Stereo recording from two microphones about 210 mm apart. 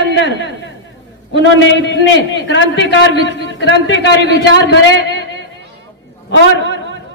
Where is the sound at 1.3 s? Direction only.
60° left (ahead or behind).